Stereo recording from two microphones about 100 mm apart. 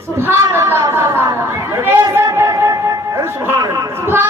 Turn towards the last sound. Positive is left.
turn(degrees=-25)  # may be behind; listen again after turning